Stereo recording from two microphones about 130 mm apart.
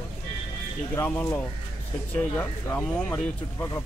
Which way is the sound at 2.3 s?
10° left (ahead or behind).